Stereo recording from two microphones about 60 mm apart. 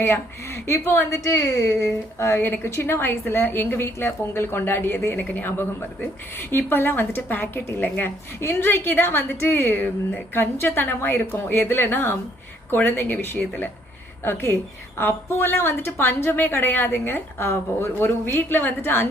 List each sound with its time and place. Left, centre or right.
0.0 s a woman's voice: left
1.2 s a woman's voice: left
17.4 s a woman's voice: left
17.9 s a woman's voice: left